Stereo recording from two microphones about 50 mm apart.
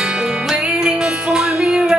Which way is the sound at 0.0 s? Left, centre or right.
Centre.